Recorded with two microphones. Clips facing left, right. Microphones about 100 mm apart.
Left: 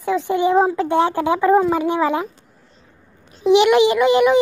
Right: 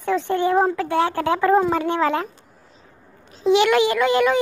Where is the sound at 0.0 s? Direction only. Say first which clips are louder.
Left 2 dB; 15° left (ahead or behind).